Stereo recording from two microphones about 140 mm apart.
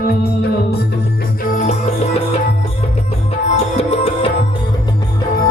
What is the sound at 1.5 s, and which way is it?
Music, 60° left (ahead or behind).